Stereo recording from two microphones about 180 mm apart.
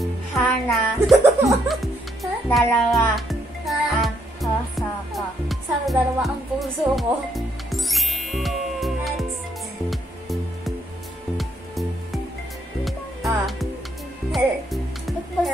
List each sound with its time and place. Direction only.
0.0 s music: centre (ahead or behind)